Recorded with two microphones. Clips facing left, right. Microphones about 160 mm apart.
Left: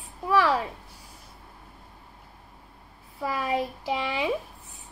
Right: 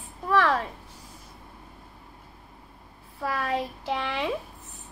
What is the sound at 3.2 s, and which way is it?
Speech, 10° left (ahead or behind).